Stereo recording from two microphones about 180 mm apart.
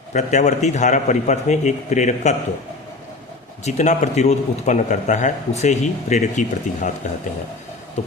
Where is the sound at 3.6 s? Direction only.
40° left (ahead or behind).